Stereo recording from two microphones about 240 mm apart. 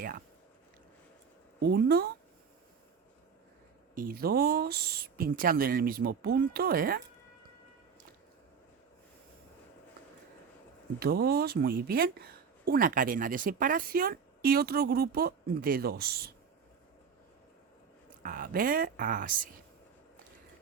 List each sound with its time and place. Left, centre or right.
1.5 s speech: right
3.9 s speech: right
11.0 s speech: right
18.2 s speech: right